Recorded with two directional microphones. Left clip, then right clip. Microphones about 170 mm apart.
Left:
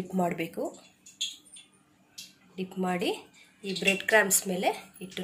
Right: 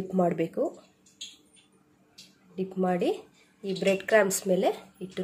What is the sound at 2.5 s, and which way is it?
Speech, 45° right (ahead or behind).